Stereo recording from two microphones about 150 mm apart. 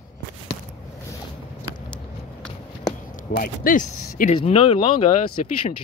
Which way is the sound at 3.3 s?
65° left (ahead or behind).